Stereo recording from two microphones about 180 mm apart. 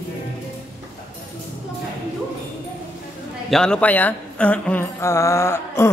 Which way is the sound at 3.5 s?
5° left (ahead or behind).